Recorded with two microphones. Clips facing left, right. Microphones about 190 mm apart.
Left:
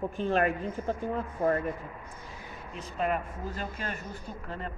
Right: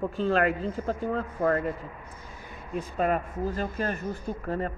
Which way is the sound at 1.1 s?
55° right (ahead or behind).